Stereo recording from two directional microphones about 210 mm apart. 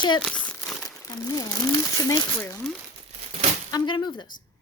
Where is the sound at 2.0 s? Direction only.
15° left (ahead or behind).